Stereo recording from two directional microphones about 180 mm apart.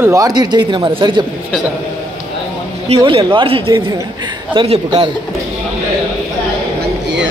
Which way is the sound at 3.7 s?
20° right (ahead or behind).